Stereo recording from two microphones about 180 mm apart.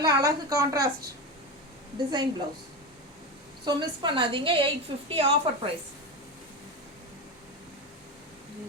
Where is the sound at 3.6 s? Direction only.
25° right (ahead or behind).